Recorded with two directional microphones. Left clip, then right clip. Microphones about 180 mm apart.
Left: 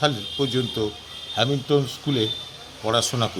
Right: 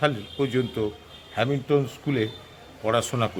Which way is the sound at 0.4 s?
30° right (ahead or behind).